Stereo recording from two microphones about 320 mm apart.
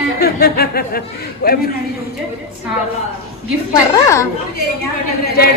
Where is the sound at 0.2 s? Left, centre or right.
Left.